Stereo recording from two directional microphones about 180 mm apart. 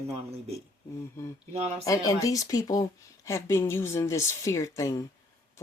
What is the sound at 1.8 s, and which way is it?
Speech, 20° left (ahead or behind).